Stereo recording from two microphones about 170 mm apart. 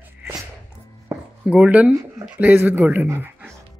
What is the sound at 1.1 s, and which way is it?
Speech, 10° right (ahead or behind).